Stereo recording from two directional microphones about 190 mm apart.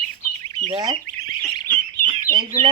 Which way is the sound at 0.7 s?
20° right (ahead or behind).